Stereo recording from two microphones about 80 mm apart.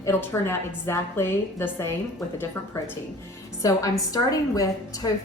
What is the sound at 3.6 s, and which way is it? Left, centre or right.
A woman's voice, left.